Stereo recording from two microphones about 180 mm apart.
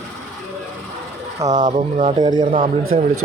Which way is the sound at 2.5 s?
45° right (ahead or behind).